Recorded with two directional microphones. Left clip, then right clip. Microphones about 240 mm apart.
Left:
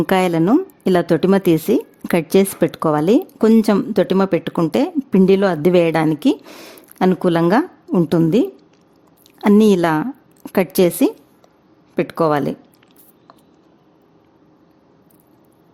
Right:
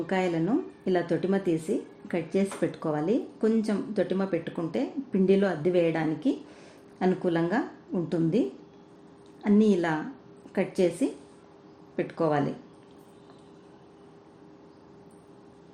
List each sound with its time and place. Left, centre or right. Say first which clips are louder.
0.1 s a woman's voice: left 11 dB; left